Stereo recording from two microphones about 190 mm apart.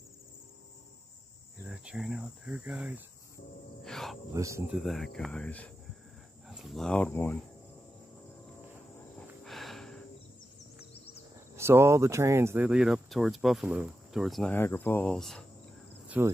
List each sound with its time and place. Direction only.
1.6 s cricket: 5° right (ahead or behind)
4.3 s speech: 15° right (ahead or behind)
4.6 s speech: centre (ahead or behind)
7.1 s speech: 15° left (ahead or behind)
9.4 s cricket: centre (ahead or behind)
11.5 s speech: 15° right (ahead or behind); by 15.4 s 5° left (ahead or behind)
16.1 s speech: 10° right (ahead or behind)